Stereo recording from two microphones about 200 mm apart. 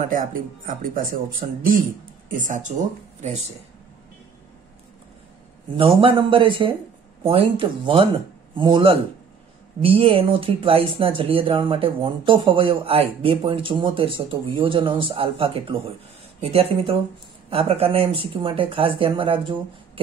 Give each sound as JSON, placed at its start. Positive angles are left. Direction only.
{"t": 0.1, "sound": "speech", "side_deg": -45}
{"t": 2.2, "sound": "speech", "side_deg": -40}
{"t": 5.8, "sound": "speech", "side_deg": -25}